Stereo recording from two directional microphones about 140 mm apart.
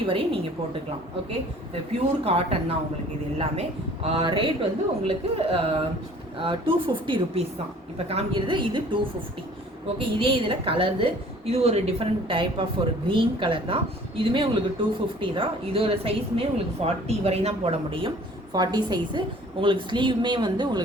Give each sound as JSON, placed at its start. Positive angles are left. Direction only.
{"t": 0.0, "sound": "a woman's voice", "side_deg": -40}
{"t": 2.2, "sound": "speech", "side_deg": -45}
{"t": 4.2, "sound": "a woman's voice", "side_deg": -35}
{"t": 18.5, "sound": "a woman's voice", "side_deg": -30}